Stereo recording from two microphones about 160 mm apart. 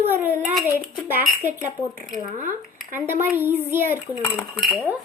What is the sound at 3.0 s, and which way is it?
Speech, 15° right (ahead or behind).